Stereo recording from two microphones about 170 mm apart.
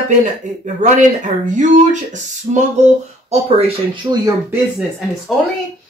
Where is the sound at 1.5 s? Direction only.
45° right (ahead or behind).